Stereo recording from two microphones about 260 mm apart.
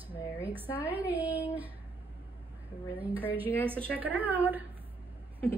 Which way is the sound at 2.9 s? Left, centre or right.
Centre.